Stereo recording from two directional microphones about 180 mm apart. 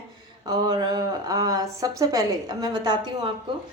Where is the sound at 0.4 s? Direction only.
25° right (ahead or behind).